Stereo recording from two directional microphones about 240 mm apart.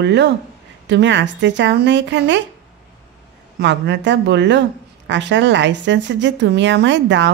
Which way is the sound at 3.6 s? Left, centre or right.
Right.